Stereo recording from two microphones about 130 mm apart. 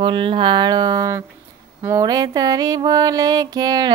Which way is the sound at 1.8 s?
25° right (ahead or behind).